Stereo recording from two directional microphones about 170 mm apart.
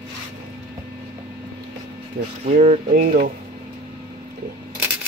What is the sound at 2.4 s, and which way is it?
Speech, 45° right (ahead or behind).